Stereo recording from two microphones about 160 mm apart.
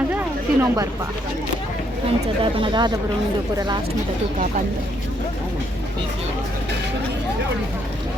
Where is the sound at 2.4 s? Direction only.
30° right (ahead or behind).